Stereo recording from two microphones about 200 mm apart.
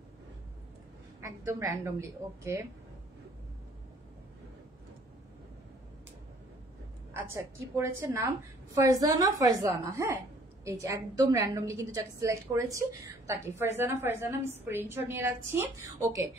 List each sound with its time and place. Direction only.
1.2 s a woman's voice: 15° right (ahead or behind)
7.2 s a woman's voice: 10° right (ahead or behind)